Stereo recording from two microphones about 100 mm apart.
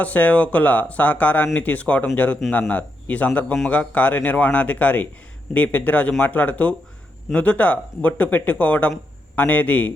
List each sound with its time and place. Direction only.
0.0 s speech: 15° left (ahead or behind)